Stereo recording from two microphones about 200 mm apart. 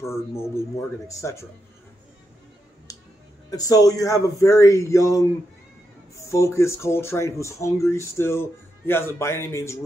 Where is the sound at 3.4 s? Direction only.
15° left (ahead or behind).